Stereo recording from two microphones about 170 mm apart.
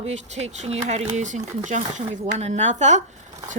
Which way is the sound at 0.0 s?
40° right (ahead or behind).